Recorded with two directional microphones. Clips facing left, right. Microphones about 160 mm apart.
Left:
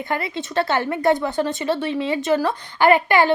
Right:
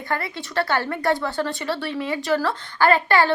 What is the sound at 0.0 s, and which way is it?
Speech, 20° left (ahead or behind).